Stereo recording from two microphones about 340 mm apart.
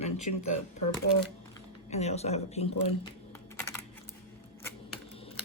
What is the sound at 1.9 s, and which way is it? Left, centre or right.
Speech, centre.